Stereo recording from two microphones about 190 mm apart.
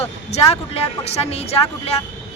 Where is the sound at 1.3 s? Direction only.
30° left (ahead or behind).